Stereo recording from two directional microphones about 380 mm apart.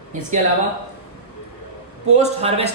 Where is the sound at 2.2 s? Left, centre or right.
Centre.